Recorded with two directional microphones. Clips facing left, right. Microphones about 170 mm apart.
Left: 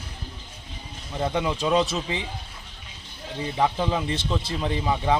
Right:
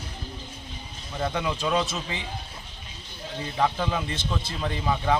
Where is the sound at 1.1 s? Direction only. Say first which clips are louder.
Left 3 dB; 20° left (ahead or behind).